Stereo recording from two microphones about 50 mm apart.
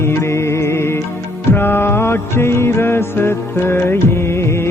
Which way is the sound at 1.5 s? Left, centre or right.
Left.